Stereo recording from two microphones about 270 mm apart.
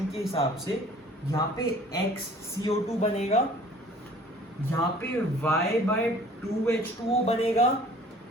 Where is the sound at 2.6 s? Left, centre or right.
Left.